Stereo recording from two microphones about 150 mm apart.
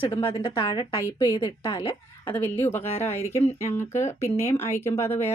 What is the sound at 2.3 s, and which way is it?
A woman's voice, 15° left (ahead or behind).